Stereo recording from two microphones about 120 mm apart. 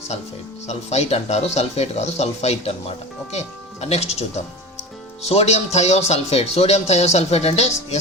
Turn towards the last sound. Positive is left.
turn(degrees=65)  # may be behind; listen again after turning